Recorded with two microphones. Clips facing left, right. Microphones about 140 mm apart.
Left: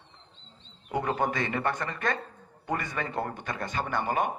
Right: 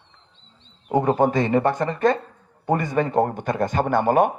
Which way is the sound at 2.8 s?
45° right (ahead or behind).